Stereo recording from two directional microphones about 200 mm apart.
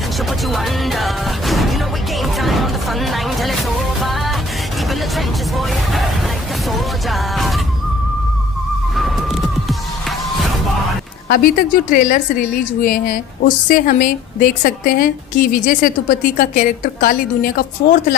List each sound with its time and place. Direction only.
0.5 s music: centre (ahead or behind)
2.4 s a sound: centre (ahead or behind)
5.1 s music: centre (ahead or behind)
8.9 s music: centre (ahead or behind)
11.2 s a woman's voice: 45° left (ahead or behind)